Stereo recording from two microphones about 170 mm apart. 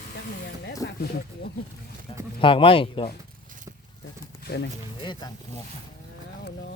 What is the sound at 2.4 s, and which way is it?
Speech, 30° left (ahead or behind).